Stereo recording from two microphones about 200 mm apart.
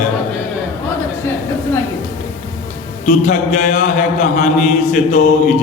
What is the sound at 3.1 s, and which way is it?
Mantra, 35° left (ahead or behind).